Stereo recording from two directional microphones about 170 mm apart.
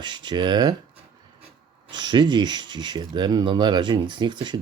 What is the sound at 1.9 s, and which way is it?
Speech, 25° right (ahead or behind).